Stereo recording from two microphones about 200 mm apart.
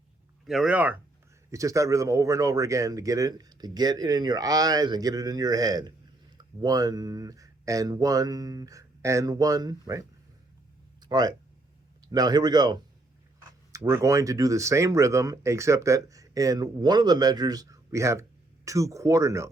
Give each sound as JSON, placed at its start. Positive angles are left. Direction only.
{"t": 0.4, "sound": "speech", "side_deg": 0}